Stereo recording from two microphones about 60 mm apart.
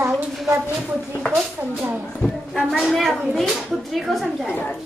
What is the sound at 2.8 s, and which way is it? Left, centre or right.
A woman's voice, centre.